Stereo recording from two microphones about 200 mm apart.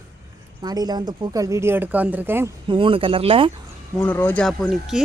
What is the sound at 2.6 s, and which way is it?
Speech, 25° right (ahead or behind).